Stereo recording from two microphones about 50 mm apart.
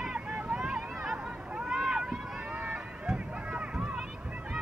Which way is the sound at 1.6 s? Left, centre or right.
Centre.